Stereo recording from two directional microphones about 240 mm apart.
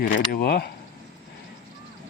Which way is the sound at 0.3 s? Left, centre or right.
Left.